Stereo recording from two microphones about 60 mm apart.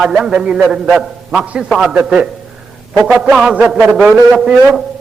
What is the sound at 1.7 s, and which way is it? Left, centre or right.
Speech, centre.